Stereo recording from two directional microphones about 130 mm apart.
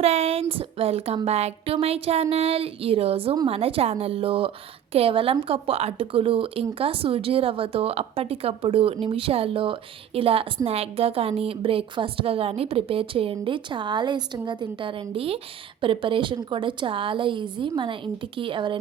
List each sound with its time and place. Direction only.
0.0 s a woman's voice: 55° right (ahead or behind)